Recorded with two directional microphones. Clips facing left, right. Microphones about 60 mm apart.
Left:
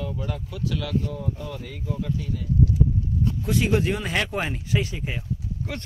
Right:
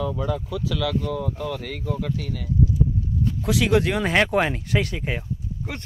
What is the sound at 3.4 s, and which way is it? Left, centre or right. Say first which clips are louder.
Speech: right 4 dB; right.